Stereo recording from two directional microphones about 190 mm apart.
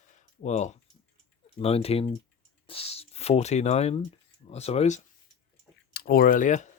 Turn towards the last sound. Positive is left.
turn(degrees=40)  # may be behind; listen again after turning